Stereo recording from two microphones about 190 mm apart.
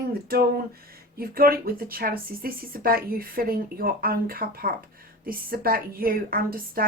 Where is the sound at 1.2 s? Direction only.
50° right (ahead or behind).